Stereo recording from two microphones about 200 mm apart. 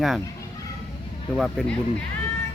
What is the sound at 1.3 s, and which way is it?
Speech, centre (ahead or behind).